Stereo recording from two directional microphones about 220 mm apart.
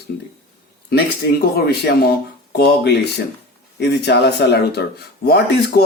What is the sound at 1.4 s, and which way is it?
Speech, 45° left (ahead or behind).